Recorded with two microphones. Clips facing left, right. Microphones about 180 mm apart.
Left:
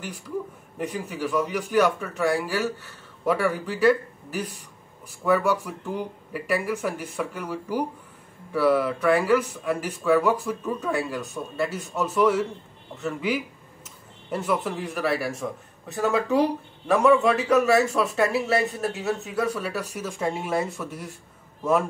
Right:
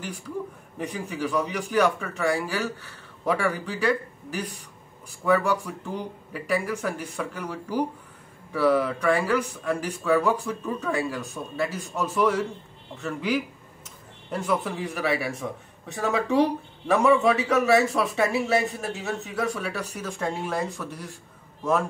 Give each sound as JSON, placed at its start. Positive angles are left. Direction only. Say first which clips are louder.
{"t": 0.7, "sound": "speech", "louder": "left 1 dB", "side_deg": 5}